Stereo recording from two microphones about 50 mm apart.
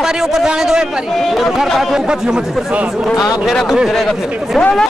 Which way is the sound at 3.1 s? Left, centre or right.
Centre.